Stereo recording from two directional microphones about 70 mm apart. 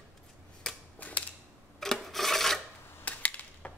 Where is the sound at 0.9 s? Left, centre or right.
Left.